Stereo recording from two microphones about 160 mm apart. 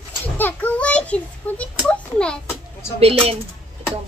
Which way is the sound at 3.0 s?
40° right (ahead or behind).